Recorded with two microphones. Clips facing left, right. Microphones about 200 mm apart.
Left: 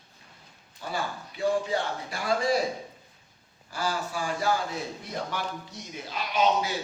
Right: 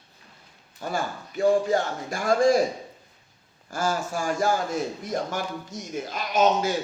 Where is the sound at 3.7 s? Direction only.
45° right (ahead or behind).